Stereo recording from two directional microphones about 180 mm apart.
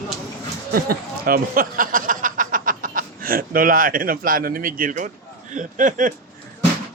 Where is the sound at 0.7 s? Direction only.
55° right (ahead or behind).